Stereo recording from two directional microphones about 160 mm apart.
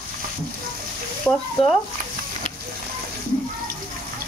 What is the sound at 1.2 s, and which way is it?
Frying, centre (ahead or behind).